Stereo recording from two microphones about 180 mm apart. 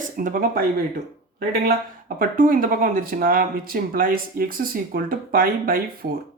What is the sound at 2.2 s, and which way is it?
Speech, 50° right (ahead or behind).